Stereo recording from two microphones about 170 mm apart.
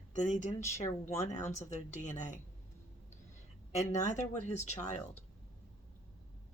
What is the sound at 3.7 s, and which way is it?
Speech, 45° left (ahead or behind).